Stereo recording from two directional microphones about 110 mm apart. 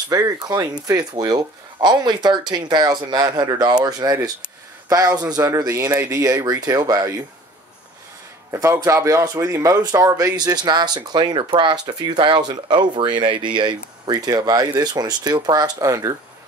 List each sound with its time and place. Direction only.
0.1 s speech: 35° right (ahead or behind)
8.5 s speech: 30° right (ahead or behind)